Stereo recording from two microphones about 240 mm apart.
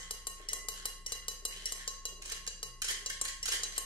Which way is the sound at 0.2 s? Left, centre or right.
Left.